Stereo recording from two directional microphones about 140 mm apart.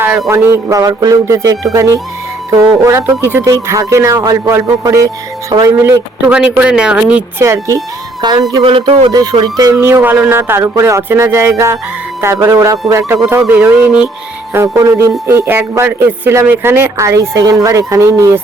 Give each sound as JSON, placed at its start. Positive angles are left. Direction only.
{"t": 0.3, "sound": "a man's voice", "side_deg": -15}
{"t": 7.4, "sound": "a man's voice", "side_deg": -20}
{"t": 9.1, "sound": "a man's voice", "side_deg": -30}